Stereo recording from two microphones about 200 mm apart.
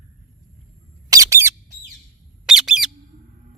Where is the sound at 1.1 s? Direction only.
15° right (ahead or behind).